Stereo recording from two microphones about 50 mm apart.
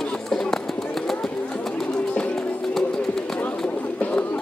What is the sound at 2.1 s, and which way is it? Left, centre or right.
Music, left.